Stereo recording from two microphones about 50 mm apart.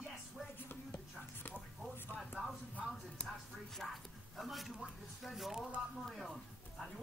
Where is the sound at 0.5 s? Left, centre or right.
Left.